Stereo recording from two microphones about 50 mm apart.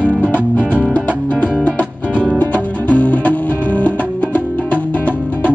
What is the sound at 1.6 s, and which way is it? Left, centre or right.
Music, left.